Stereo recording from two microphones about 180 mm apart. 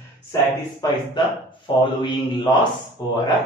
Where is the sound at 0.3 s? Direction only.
20° left (ahead or behind).